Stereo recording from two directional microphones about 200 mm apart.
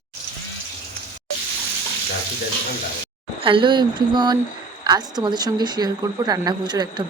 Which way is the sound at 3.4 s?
25° right (ahead or behind).